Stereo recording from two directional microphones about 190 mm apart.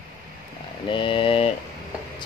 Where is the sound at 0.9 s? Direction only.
25° left (ahead or behind).